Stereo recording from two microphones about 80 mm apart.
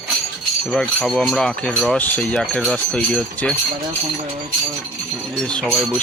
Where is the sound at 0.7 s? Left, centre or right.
Centre.